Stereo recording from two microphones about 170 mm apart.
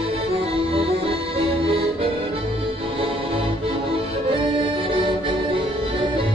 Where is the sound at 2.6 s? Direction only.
30° right (ahead or behind).